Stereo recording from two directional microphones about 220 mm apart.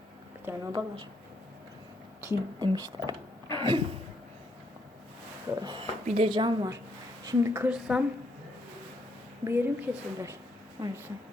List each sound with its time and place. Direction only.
0.4 s speech: 20° right (ahead or behind)
2.2 s speech: 15° right (ahead or behind)
5.6 s a woman's voice: 25° right (ahead or behind); by 8.0 s 5° right (ahead or behind)
9.4 s a woman's voice: 10° right (ahead or behind)